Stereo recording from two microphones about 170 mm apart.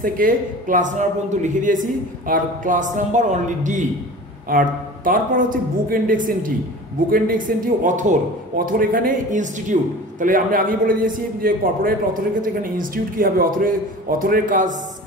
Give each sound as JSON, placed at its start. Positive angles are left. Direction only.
{"t": 0.0, "sound": "a man's voice", "side_deg": -55}